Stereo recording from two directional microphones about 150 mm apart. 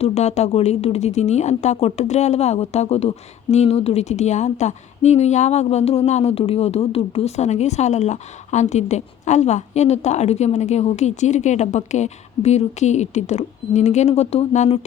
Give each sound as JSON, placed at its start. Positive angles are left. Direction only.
{"t": 0.0, "sound": "a woman's voice", "side_deg": 45}